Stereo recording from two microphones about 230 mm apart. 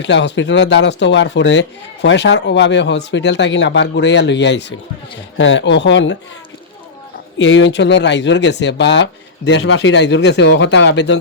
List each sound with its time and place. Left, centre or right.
0.0 s speech: left
7.3 s speech: left